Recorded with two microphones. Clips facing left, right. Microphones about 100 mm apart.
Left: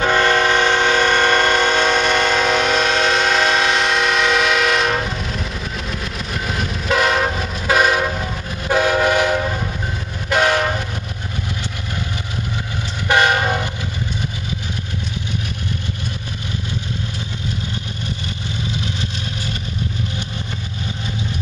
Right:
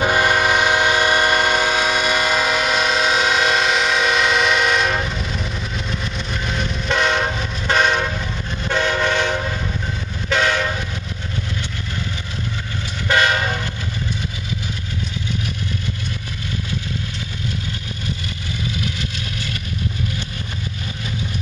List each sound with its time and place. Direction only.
0.0 s train: 10° right (ahead or behind)
6.1 s train: 5° left (ahead or behind)
10.4 s train: 45° left (ahead or behind)
13.1 s train: 20° left (ahead or behind)